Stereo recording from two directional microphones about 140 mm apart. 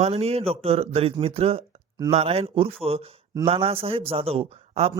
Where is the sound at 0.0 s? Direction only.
45° right (ahead or behind).